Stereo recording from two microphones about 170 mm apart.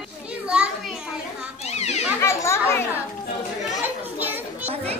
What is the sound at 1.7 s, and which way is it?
Children playing, 40° left (ahead or behind).